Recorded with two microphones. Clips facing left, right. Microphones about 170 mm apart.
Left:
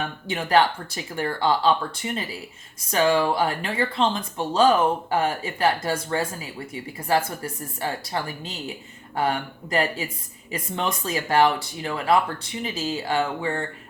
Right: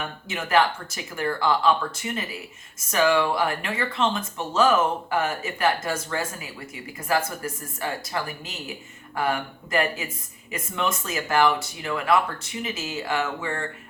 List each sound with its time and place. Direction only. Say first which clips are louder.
0.3 s a woman's voice: left 2 dB; 30° left (ahead or behind)